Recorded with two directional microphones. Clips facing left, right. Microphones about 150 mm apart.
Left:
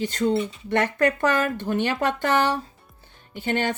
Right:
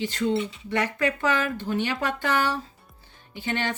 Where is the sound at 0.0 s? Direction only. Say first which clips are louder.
Left 2 dB; 40° left (ahead or behind).